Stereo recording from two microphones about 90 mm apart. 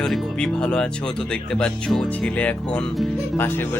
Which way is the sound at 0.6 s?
10° left (ahead or behind).